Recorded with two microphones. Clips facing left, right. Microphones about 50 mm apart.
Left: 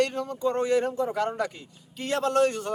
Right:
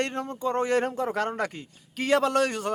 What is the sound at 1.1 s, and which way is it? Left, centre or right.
Speech, right.